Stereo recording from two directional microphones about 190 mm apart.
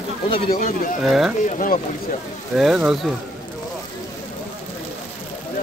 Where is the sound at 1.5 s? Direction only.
45° left (ahead or behind).